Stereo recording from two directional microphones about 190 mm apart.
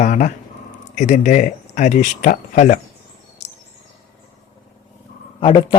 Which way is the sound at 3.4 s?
35° left (ahead or behind).